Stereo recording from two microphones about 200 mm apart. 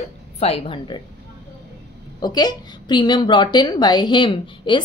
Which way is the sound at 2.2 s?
20° left (ahead or behind).